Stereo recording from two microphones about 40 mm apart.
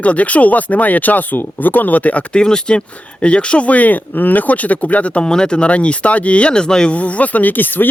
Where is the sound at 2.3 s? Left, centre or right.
Left.